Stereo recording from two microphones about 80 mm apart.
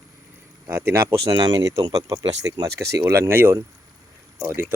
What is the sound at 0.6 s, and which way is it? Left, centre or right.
Speech, right.